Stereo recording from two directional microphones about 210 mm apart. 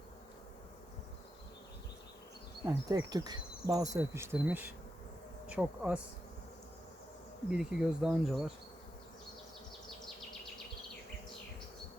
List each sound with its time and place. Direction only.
2.6 s insect: 20° right (ahead or behind)
5.5 s bee: 5° right (ahead or behind)
7.5 s speech: 5° right (ahead or behind)